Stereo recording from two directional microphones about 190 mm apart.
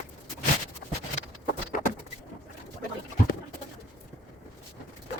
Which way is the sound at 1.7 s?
45° left (ahead or behind).